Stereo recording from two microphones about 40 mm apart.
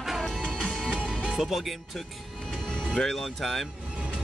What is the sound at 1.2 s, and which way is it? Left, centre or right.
Speech, centre.